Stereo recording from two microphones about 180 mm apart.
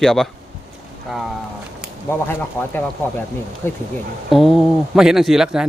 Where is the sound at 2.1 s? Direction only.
10° left (ahead or behind).